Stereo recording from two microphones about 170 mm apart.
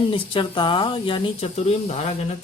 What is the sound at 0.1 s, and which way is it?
Speech, 30° left (ahead or behind).